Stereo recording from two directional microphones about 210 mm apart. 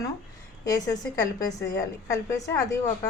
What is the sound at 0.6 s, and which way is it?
Speech, 15° left (ahead or behind).